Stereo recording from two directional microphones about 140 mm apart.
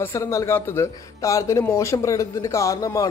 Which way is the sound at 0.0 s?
20° left (ahead or behind).